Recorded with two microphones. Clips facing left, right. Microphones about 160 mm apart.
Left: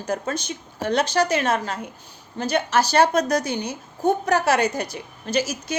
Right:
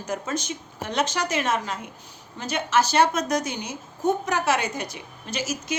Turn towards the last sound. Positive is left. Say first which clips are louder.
# left 6 dB
turn(degrees=35)  # may be behind; listen again after turning